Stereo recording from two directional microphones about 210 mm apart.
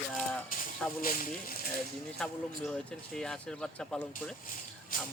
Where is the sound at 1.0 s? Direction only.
40° left (ahead or behind).